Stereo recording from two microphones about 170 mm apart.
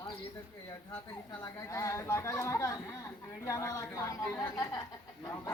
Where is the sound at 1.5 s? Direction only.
20° left (ahead or behind).